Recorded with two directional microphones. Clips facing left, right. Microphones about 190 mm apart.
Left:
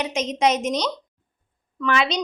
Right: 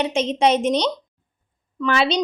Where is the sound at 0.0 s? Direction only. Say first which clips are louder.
Right 3 dB; 30° right (ahead or behind).